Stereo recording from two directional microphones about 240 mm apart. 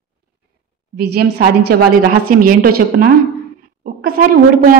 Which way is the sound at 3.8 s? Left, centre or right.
Right.